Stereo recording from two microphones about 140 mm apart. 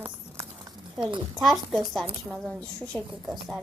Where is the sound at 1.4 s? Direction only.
Centre (ahead or behind).